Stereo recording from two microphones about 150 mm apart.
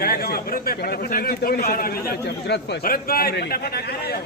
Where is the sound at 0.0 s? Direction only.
85° left.